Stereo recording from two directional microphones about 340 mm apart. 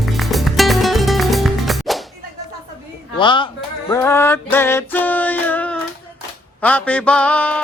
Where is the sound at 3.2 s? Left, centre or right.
Centre.